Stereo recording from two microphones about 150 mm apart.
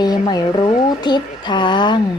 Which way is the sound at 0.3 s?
30° left (ahead or behind).